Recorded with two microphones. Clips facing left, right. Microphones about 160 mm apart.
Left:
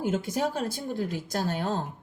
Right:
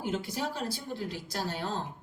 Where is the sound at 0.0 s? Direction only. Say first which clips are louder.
Left 6 dB; 45° left (ahead or behind).